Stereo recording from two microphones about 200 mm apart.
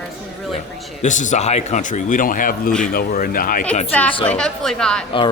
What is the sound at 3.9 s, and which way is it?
A woman's voice, 10° left (ahead or behind).